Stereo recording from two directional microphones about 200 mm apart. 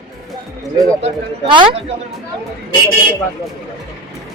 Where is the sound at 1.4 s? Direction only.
25° right (ahead or behind).